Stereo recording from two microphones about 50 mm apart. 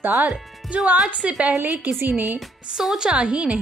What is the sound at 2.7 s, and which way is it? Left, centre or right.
Speech, centre.